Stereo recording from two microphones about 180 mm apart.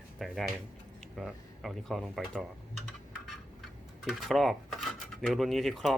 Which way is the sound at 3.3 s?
Centre (ahead or behind).